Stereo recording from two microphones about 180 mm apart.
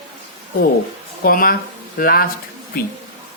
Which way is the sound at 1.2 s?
55° left (ahead or behind).